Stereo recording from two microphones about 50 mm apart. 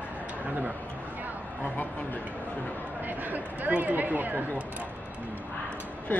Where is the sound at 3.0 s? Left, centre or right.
Right.